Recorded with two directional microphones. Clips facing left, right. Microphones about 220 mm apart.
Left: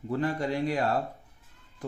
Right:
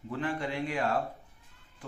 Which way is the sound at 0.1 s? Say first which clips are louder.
Left 5 dB; 40° left (ahead or behind).